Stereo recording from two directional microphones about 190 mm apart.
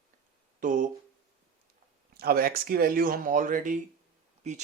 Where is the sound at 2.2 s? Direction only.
50° right (ahead or behind).